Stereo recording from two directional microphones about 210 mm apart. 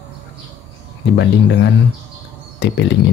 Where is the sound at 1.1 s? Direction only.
55° left (ahead or behind).